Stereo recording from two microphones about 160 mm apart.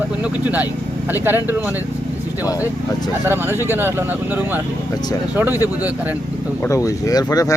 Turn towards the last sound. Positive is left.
turn(degrees=20)  # may be behind; listen again after turning